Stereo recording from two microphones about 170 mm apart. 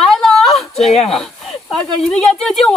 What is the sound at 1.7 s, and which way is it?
Speech, centre (ahead or behind).